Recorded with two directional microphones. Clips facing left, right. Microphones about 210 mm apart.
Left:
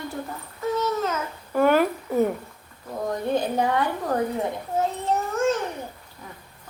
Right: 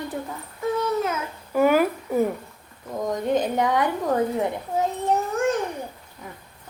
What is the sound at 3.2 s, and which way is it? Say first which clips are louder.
Speech: right 2 dB; 20° right (ahead or behind).